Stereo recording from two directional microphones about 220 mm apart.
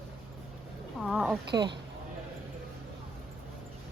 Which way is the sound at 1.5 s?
20° right (ahead or behind).